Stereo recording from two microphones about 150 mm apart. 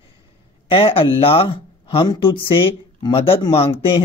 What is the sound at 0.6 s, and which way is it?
Speech, 35° left (ahead or behind).